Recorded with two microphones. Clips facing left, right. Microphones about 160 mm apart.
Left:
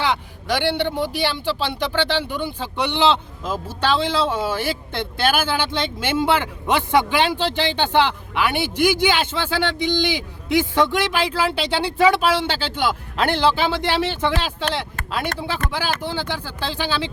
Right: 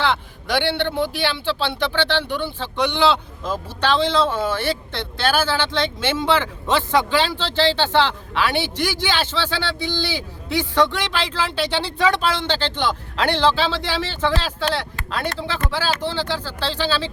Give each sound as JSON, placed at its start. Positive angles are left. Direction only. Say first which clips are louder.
{"t": 0.5, "sound": "speech", "louder": "even", "side_deg": 5}